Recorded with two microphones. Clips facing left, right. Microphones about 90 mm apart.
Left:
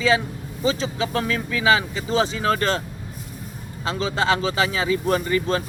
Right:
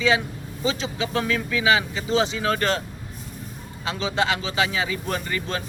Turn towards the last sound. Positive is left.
turn(degrees=35)  # may be behind; listen again after turning